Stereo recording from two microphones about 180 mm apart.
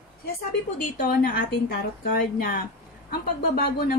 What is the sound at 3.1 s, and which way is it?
Speech, 60° left (ahead or behind).